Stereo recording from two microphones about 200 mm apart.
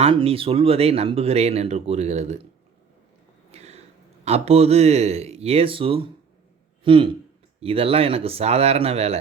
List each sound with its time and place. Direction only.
0.0 s speech: 30° right (ahead or behind)
3.5 s a sound: 30° right (ahead or behind)
4.3 s speech: 30° right (ahead or behind)